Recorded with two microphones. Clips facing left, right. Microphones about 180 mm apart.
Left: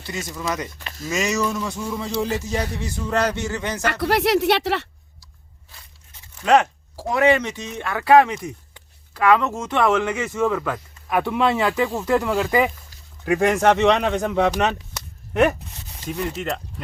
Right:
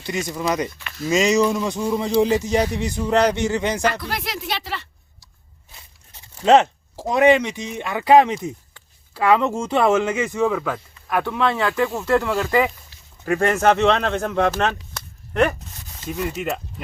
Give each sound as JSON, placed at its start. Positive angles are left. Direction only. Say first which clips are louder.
{"t": 0.0, "sound": "speech", "louder": "right 4 dB", "side_deg": -20}
{"t": 0.8, "sound": "speech", "louder": "right 1 dB", "side_deg": 40}
{"t": 1.0, "sound": "speech", "louder": "right 6 dB", "side_deg": -20}
{"t": 3.8, "sound": "speech", "louder": "left 4 dB", "side_deg": 65}
{"t": 5.7, "sound": "speech", "louder": "right 2 dB", "side_deg": -25}
{"t": 9.6, "sound": "speech", "louder": "right 1 dB", "side_deg": -10}
{"t": 11.2, "sound": "speech", "louder": "left 1 dB", "side_deg": 10}
{"t": 14.9, "sound": "a sound", "louder": "even", "side_deg": 5}
{"t": 16.0, "sound": "speech", "louder": "right 1 dB", "side_deg": -5}